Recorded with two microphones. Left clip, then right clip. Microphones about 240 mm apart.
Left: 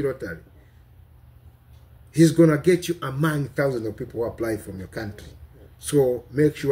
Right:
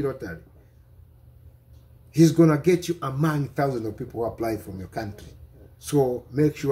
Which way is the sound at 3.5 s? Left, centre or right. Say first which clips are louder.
Left 2 dB; right.